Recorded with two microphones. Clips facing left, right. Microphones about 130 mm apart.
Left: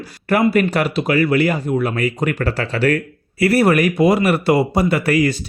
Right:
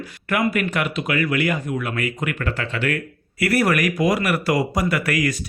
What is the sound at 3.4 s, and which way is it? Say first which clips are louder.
Speech: left 5 dB; 25° left (ahead or behind).